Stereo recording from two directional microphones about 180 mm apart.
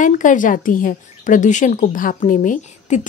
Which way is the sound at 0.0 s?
45° left (ahead or behind).